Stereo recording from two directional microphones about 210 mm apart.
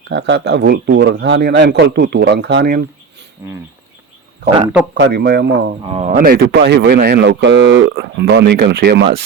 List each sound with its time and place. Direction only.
0.1 s speech: 55° right (ahead or behind)
4.9 s speech: 55° right (ahead or behind)
5.8 s speech: 30° right (ahead or behind)
6.1 s speech: 45° right (ahead or behind)